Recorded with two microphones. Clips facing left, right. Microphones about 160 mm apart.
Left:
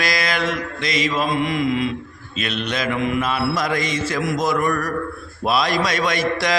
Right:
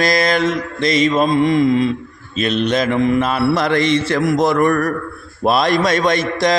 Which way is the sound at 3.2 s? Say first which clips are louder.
Right 5 dB; 55° right (ahead or behind).